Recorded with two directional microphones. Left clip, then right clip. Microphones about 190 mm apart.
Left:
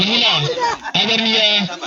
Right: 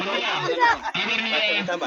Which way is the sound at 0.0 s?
35° left (ahead or behind).